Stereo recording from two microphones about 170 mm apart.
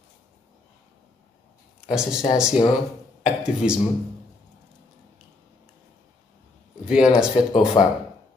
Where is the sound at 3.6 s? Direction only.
5° right (ahead or behind).